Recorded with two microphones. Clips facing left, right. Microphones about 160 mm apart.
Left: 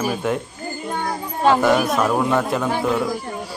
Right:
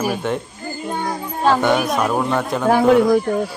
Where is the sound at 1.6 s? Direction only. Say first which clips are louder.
Even; centre (ahead or behind).